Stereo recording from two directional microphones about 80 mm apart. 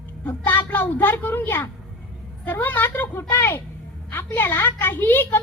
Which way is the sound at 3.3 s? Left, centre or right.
Left.